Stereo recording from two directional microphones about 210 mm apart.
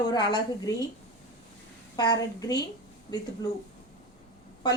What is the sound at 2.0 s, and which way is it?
Speech, 20° left (ahead or behind).